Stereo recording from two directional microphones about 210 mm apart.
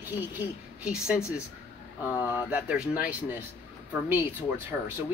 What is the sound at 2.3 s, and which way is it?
Speech, 5° right (ahead or behind).